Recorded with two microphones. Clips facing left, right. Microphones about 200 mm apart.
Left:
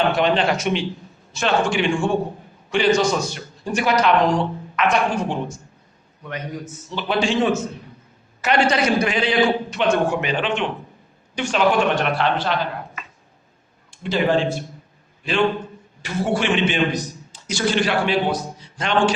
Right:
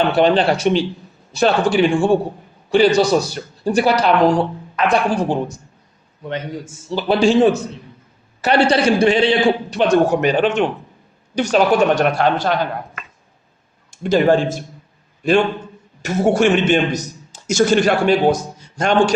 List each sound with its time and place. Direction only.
0.1 s a man's voice: 35° right (ahead or behind)
13.9 s a man's voice: 45° right (ahead or behind)